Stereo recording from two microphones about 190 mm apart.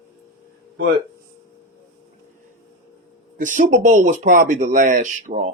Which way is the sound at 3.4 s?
40° right (ahead or behind).